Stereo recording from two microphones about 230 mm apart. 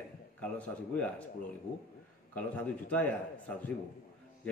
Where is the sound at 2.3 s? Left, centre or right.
Centre.